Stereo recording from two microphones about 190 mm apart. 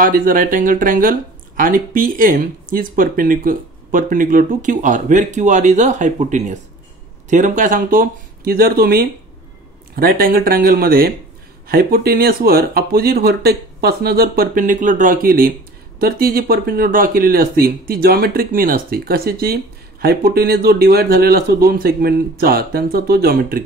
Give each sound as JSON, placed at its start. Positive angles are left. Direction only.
{"t": 0.0, "sound": "speech", "side_deg": -45}